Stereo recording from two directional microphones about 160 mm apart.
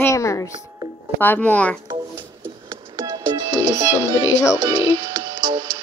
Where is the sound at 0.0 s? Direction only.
20° left (ahead or behind).